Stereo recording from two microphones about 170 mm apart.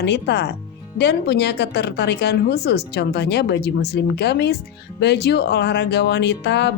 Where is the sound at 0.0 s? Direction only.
80° left.